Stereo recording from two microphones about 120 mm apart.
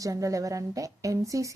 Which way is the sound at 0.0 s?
30° right (ahead or behind).